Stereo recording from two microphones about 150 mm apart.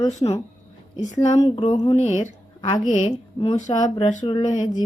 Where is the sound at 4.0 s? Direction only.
55° left (ahead or behind).